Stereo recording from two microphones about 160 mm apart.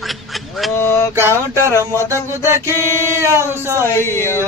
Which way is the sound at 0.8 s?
15° left (ahead or behind).